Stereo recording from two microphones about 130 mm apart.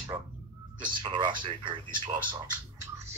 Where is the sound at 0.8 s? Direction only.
35° right (ahead or behind).